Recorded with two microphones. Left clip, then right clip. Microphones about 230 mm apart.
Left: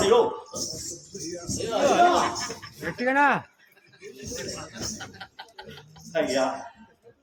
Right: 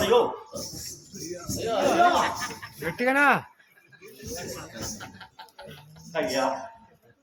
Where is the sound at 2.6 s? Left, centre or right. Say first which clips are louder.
Right 2 dB; right.